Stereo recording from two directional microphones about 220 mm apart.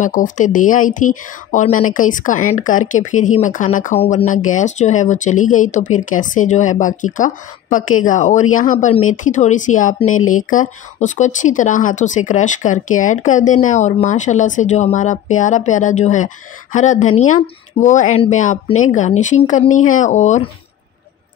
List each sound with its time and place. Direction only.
0.0 s speech: 35° left (ahead or behind)